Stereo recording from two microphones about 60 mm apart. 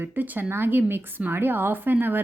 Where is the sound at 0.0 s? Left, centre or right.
Right.